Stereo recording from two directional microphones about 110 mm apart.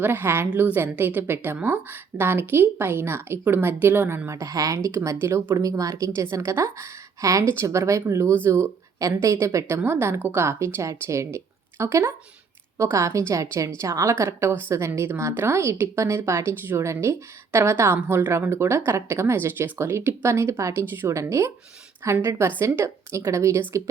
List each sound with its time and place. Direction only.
0.0 s a woman's voice: 20° right (ahead or behind)